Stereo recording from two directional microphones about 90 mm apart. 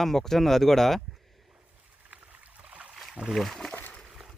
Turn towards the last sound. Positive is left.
turn(degrees=15)  # may be behind; listen again after turning